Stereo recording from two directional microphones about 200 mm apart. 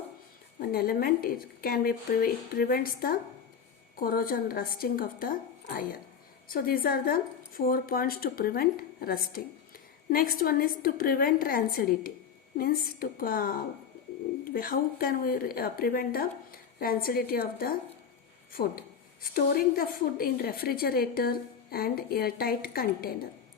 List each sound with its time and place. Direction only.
0.6 s a woman's voice: 50° left (ahead or behind)
6.5 s a woman's voice: 45° left (ahead or behind)